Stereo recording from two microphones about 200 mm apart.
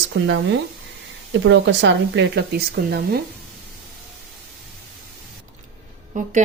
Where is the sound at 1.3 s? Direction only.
65° right (ahead or behind).